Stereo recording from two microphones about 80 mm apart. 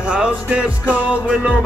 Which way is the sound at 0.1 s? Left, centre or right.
Centre.